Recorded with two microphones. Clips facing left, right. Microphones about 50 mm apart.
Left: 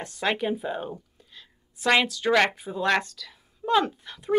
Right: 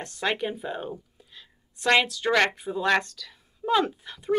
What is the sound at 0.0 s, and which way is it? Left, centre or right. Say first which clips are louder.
A woman's voice: left 1 dB; centre.